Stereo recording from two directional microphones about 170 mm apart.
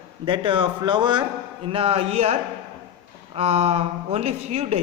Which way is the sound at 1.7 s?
35° right (ahead or behind).